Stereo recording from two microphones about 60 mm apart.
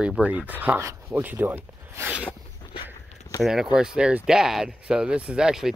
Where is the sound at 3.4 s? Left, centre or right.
Centre.